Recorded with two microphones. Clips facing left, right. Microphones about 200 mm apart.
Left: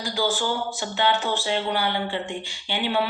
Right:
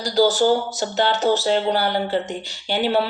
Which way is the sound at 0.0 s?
40° right (ahead or behind).